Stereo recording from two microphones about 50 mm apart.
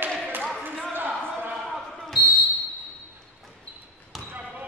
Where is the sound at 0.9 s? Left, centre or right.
Right.